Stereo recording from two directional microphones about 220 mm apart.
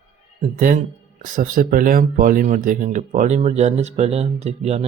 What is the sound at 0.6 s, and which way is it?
Speech, 35° right (ahead or behind).